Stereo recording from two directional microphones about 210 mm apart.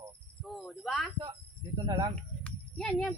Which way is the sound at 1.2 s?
20° right (ahead or behind).